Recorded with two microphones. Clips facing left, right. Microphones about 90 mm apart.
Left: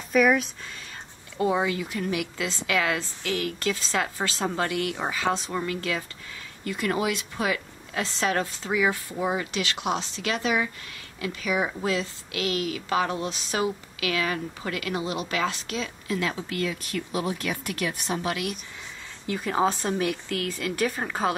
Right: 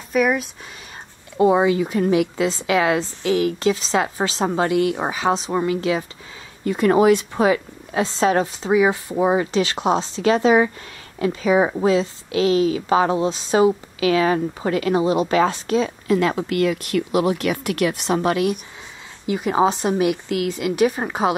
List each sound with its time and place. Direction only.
0.1 s speech: 5° right (ahead or behind)
1.4 s a woman's voice: 25° right (ahead or behind)
6.6 s a woman's voice: 35° right (ahead or behind)
15.8 s speech: 50° right (ahead or behind); by 18.2 s 75° right (ahead or behind)
19.2 s speech: 15° right (ahead or behind)